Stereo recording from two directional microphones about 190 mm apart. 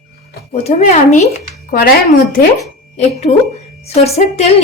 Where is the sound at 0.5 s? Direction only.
35° left (ahead or behind).